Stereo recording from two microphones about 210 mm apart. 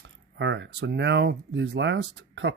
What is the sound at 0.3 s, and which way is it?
Speech, 60° right (ahead or behind).